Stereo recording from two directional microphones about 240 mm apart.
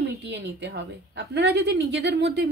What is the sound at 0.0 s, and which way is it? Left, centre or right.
Speech, right.